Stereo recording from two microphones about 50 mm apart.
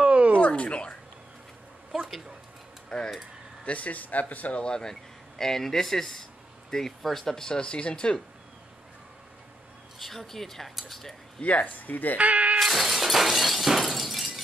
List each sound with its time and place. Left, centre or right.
0.0 s a sound: right
0.4 s a sound: left
1.9 s a sound: centre
2.9 s speech: centre
3.6 s speech: left
4.6 s speech: centre
9.9 s speech: centre
11.4 s speech: left
12.2 s speech: right
12.5 s shatter: centre